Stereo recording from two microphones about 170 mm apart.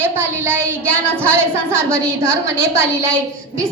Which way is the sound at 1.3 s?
15° right (ahead or behind).